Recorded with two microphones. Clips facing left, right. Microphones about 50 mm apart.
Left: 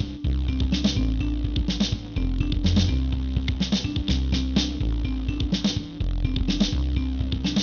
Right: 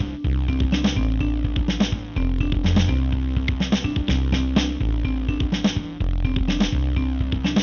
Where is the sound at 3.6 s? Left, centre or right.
Right.